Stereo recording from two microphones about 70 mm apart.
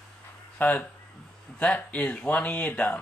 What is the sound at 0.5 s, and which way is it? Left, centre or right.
Speech, left.